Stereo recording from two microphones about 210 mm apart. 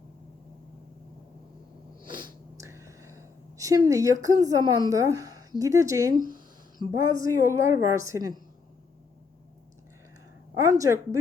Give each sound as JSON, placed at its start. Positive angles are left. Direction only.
{"t": 2.0, "sound": "a sound", "side_deg": -25}
{"t": 4.9, "sound": "a woman's voice", "side_deg": -15}
{"t": 10.6, "sound": "a woman's voice", "side_deg": -15}